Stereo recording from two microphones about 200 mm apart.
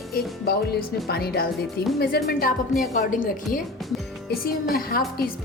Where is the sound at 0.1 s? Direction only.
50° left (ahead or behind).